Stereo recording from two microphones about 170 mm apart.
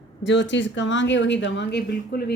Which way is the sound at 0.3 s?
90° left.